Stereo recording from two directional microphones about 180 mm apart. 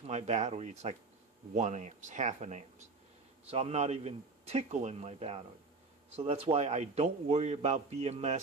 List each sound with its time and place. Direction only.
0.0 s a man's voice: 40° right (ahead or behind)